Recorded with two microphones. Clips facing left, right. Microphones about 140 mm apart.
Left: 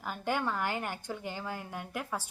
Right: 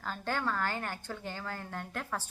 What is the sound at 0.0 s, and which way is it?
A woman's voice, 15° left (ahead or behind).